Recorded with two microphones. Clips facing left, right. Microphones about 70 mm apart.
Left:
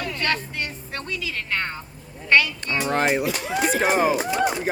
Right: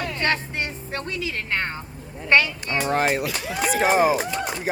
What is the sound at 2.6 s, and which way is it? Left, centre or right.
Speech, centre.